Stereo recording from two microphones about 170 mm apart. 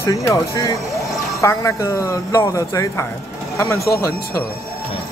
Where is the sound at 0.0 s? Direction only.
20° left (ahead or behind).